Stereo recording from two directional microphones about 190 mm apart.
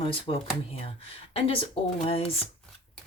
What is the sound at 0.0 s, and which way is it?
Speech, 30° left (ahead or behind).